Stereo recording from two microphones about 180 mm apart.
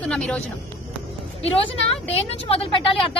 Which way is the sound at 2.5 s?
30° left (ahead or behind).